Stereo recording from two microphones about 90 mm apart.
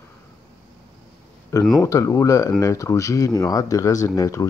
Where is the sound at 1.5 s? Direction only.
35° left (ahead or behind).